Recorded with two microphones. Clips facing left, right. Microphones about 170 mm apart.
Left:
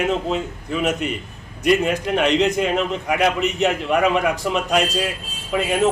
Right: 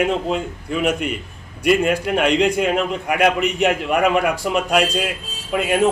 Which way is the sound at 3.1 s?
55° right (ahead or behind).